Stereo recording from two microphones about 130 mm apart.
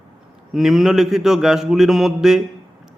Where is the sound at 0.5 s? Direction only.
Centre (ahead or behind).